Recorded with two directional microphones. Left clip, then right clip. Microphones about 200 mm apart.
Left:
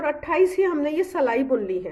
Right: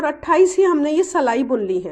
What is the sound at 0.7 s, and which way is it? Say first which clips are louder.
Speech: right 6 dB; 35° right (ahead or behind).